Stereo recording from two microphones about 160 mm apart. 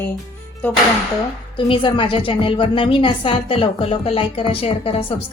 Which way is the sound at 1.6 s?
30° left (ahead or behind).